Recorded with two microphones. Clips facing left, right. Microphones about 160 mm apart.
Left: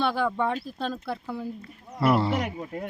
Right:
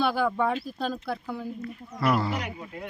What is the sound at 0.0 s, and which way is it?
Speech, centre (ahead or behind).